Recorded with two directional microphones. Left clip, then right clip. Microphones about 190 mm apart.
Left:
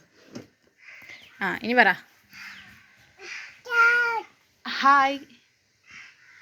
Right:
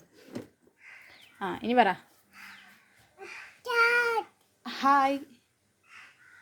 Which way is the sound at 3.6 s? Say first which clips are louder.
Left 4 dB; 30° right (ahead or behind).